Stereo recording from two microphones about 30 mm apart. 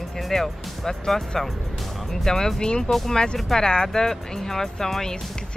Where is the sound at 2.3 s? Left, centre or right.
Centre.